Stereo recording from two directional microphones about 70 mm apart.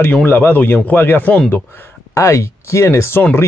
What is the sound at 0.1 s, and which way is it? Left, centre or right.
Speech, left.